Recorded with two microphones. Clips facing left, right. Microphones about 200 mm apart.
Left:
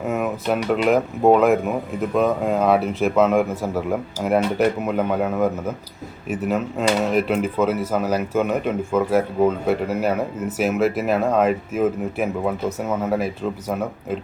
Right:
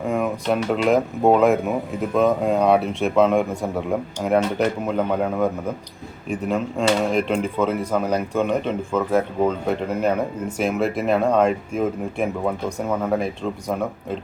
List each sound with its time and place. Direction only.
0.1 s speech: 5° left (ahead or behind)